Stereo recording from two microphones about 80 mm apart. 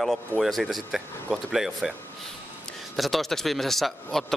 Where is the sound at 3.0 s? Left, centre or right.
Centre.